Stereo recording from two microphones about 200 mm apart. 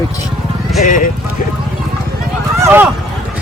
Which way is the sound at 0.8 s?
40° left (ahead or behind).